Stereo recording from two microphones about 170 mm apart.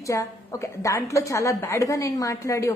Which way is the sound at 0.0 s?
20° left (ahead or behind).